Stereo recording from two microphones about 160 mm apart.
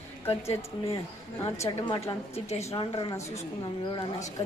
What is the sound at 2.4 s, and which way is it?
Speech, 40° left (ahead or behind).